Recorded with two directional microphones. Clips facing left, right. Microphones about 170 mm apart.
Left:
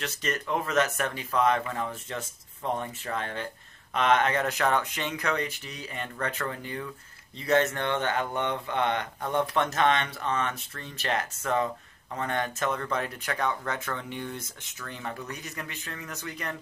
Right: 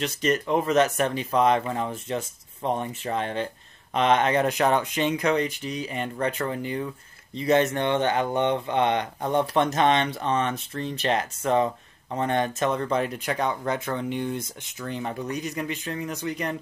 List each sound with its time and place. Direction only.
0.0 s speech: 20° right (ahead or behind)